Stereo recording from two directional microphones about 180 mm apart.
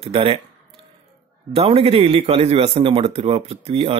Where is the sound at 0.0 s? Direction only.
30° right (ahead or behind).